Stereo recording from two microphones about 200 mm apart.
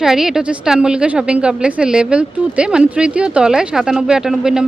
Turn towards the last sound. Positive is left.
turn(degrees=-5)  # may be behind; listen again after turning